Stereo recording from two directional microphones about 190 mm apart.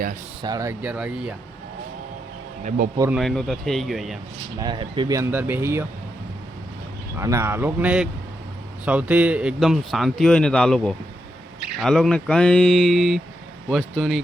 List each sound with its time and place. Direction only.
0.4 s speech: 15° right (ahead or behind)
2.6 s speech: 50° right (ahead or behind)
3.2 s speech: centre (ahead or behind)
4.6 s speech: 25° right (ahead or behind)
7.2 s speech: 15° right (ahead or behind)